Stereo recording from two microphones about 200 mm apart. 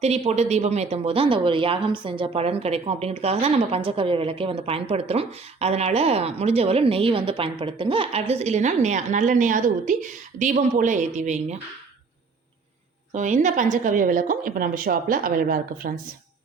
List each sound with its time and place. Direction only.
0.0 s a woman's voice: 35° right (ahead or behind)
13.1 s a woman's voice: 40° right (ahead or behind)